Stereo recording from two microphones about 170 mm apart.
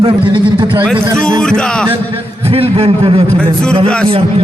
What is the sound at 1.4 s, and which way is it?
Speech, 5° left (ahead or behind).